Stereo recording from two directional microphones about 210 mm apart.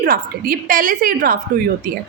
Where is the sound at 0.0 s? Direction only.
45° right (ahead or behind).